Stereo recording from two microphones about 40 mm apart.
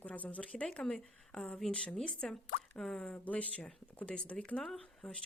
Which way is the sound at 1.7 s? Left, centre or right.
Left.